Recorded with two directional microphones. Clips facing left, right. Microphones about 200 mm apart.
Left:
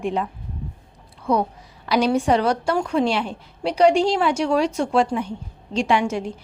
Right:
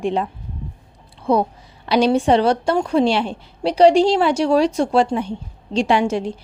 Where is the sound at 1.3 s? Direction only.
30° right (ahead or behind).